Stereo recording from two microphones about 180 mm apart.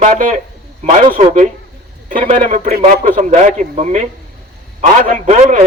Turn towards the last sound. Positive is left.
turn(degrees=-40)  # may be behind; listen again after turning